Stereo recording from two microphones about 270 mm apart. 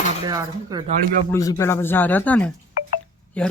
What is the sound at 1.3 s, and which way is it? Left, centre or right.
Speech, centre.